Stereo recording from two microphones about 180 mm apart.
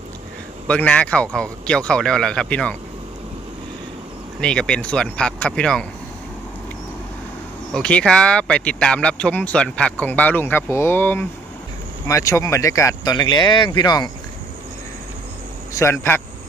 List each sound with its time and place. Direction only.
0.7 s speech: 5° left (ahead or behind)
4.4 s speech: 5° left (ahead or behind)
7.7 s speech: 5° left (ahead or behind); by 14.1 s 25° left (ahead or behind)
15.8 s speech: 15° left (ahead or behind)